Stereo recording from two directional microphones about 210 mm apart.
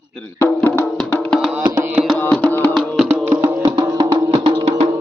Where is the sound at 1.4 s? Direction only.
5° right (ahead or behind).